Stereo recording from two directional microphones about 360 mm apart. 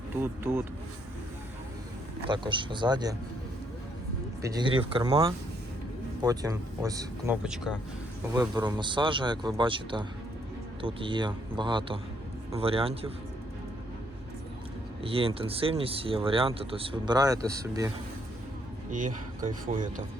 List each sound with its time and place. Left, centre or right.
0.2 s speech: centre
2.3 s speech: centre
4.4 s speech: centre
15.0 s speech: centre
18.9 s speech: right